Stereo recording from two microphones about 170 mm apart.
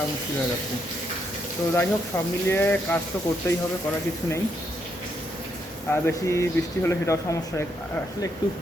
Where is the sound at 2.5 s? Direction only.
15° left (ahead or behind).